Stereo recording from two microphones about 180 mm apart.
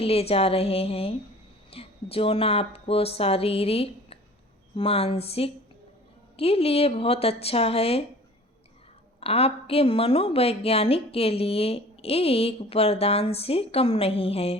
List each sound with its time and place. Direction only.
0.0 s a woman's voice: 35° left (ahead or behind)
9.2 s a woman's voice: 35° left (ahead or behind)